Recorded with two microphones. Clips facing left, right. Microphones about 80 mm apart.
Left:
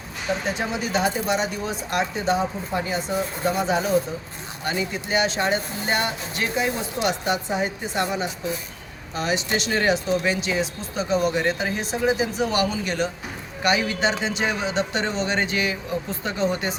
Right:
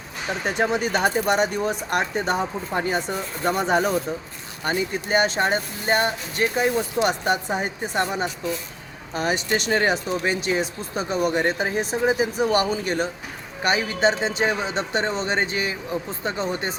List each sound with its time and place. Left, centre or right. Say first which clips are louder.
0.4 s speech: right 4 dB; right
4.6 s speech: right 2 dB; right